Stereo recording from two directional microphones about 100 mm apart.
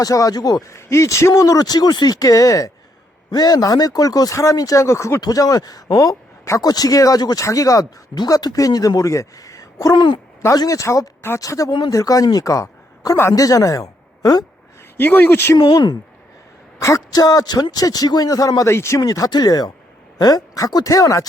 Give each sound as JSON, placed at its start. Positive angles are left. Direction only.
{"t": 0.0, "sound": "speech", "side_deg": 35}
{"t": 10.4, "sound": "speech", "side_deg": 35}
{"t": 14.9, "sound": "speech", "side_deg": 20}
{"t": 15.5, "sound": "speech", "side_deg": 45}